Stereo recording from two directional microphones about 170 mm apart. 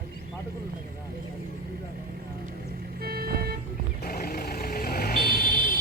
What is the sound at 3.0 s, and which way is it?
Vehicle, 60° right (ahead or behind).